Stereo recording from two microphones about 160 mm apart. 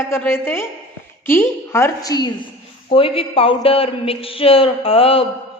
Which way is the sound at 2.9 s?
35° left (ahead or behind).